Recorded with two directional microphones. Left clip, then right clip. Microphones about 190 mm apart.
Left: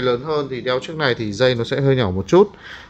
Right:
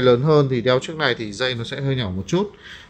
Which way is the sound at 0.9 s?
5° left (ahead or behind).